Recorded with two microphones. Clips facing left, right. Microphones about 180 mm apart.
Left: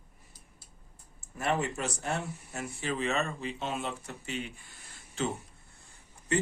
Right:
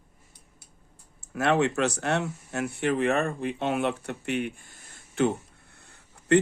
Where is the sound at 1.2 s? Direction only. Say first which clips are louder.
Right 7 dB; 75° right (ahead or behind).